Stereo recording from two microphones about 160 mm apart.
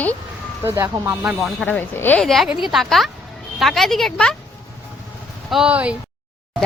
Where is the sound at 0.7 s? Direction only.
15° right (ahead or behind).